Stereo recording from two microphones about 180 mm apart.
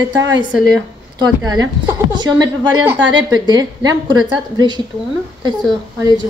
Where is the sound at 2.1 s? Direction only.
25° right (ahead or behind).